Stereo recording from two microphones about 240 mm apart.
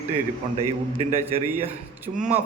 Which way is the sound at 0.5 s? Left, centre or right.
Right.